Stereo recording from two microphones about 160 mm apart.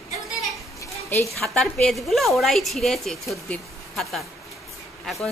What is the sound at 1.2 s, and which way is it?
A woman's voice, 5° left (ahead or behind).